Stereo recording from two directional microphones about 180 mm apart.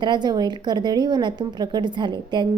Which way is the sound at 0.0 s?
25° right (ahead or behind).